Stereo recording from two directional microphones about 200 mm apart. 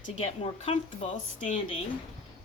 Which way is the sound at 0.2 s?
30° left (ahead or behind).